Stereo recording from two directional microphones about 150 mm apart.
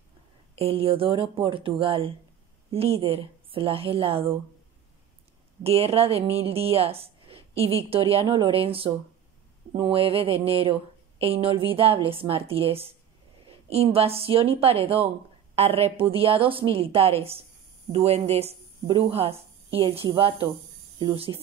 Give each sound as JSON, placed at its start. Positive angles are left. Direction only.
{"t": 0.6, "sound": "a woman's voice", "side_deg": -40}
{"t": 5.6, "sound": "a woman's voice", "side_deg": -40}